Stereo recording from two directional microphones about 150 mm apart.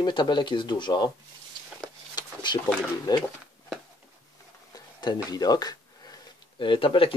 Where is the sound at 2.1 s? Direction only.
30° left (ahead or behind).